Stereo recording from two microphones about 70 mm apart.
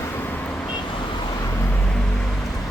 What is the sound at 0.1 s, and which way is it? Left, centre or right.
Vehicle, left.